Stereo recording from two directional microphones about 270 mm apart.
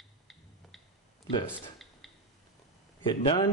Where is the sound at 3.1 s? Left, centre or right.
Centre.